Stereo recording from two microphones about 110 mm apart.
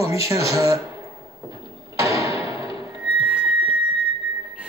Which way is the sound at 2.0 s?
30° right (ahead or behind).